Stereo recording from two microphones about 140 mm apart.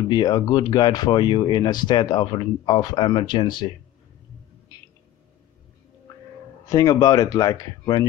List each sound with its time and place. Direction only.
0.1 s speech: 30° left (ahead or behind)
6.7 s speech: 25° left (ahead or behind)